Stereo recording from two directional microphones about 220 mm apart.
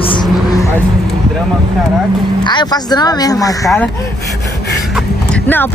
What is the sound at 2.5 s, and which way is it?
Speech, 20° left (ahead or behind).